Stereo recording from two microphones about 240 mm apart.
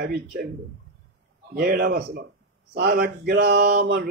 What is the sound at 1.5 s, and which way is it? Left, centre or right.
Speech, right.